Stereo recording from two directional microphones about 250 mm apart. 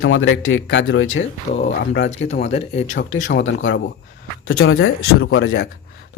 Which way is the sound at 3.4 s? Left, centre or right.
Left.